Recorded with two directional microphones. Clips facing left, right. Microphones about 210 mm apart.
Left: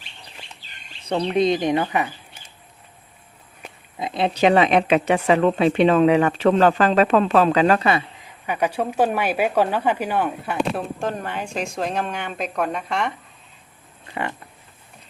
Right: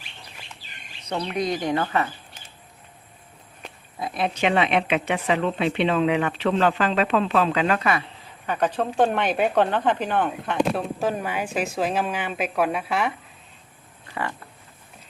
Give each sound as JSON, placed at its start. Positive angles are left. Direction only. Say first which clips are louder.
{"t": 1.0, "sound": "speech", "louder": "left 7 dB", "side_deg": 30}
{"t": 3.6, "sound": "speech", "louder": "left 2 dB", "side_deg": 20}
{"t": 8.4, "sound": "speech", "louder": "left 1 dB", "side_deg": 10}
{"t": 14.1, "sound": "a sound", "louder": "left 2 dB", "side_deg": 20}